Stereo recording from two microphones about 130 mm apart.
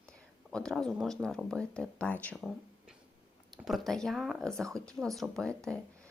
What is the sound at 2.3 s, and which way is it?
Speech, 5° right (ahead or behind).